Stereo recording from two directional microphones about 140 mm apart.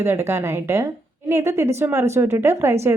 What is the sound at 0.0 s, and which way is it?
A woman's voice, 20° right (ahead or behind).